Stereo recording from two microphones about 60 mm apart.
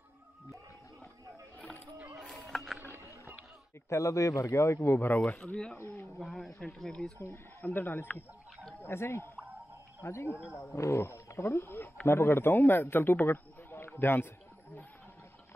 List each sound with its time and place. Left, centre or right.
2.1 s a sound: centre
2.8 s a sound: right
3.9 s a man's voice: left
5.8 s a man's voice: left
6.1 s speech: centre
7.6 s speech: left
8.8 s a man's voice: left